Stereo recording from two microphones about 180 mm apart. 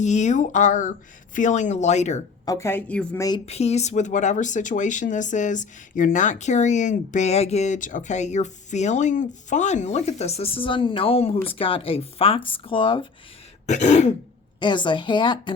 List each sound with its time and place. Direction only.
0.0 s speech: 40° left (ahead or behind)
2.4 s a woman's voice: 20° left (ahead or behind)
3.2 s speech: 20° left (ahead or behind)
3.4 s speech: 35° left (ahead or behind)
13.7 s speech: 40° left (ahead or behind)
14.6 s speech: 25° left (ahead or behind)